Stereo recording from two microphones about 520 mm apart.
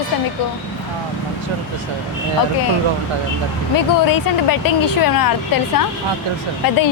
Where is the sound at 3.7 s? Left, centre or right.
Left.